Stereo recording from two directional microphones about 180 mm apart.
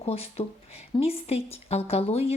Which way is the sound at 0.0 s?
35° left (ahead or behind).